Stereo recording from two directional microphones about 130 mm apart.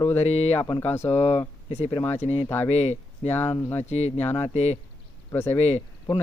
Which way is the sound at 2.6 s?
60° left (ahead or behind).